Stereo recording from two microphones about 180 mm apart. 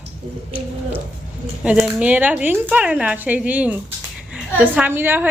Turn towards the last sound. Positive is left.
turn(degrees=-10)  # may be behind; listen again after turning